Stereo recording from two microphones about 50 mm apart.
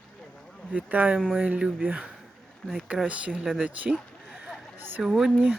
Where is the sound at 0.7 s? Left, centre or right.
Right.